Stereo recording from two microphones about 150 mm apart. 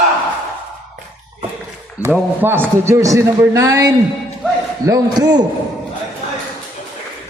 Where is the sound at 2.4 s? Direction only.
15° right (ahead or behind).